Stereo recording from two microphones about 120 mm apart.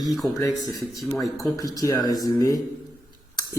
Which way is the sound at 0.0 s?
Centre (ahead or behind).